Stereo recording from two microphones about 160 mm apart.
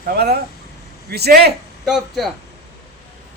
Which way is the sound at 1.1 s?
90° right.